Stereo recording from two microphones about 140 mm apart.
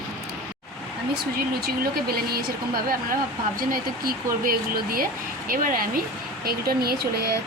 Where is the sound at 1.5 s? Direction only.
90° right.